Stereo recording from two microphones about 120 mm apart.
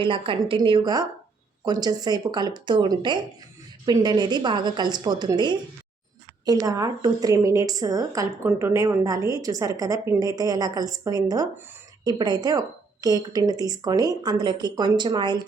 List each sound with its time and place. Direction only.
0.0 s a woman's voice: 45° right (ahead or behind)